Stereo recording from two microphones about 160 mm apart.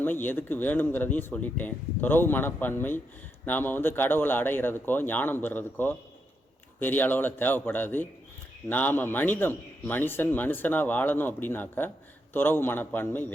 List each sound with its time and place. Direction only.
0.0 s a man's voice: 10° left (ahead or behind)